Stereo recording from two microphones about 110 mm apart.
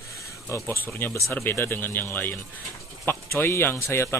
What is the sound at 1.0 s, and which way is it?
A man's voice, 20° left (ahead or behind).